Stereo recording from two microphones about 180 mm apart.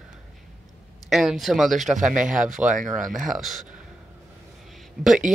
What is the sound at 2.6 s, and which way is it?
Speech, 45° right (ahead or behind).